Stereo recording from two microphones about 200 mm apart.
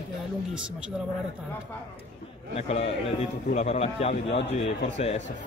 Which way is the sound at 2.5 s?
30° left (ahead or behind).